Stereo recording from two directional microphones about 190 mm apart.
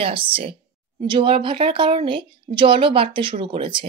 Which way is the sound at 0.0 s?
30° right (ahead or behind).